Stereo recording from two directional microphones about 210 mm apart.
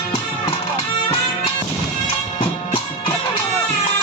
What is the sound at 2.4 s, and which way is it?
Music, 25° left (ahead or behind).